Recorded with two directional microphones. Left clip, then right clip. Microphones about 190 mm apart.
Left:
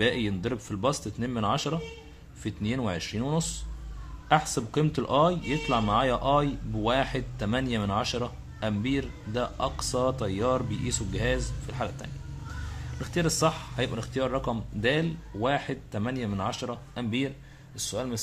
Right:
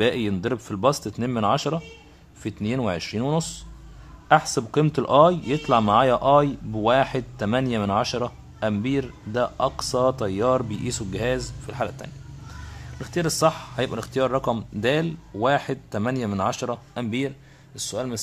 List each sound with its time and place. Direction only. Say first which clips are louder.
0.0 s speech: right 4 dB; 25° right (ahead or behind)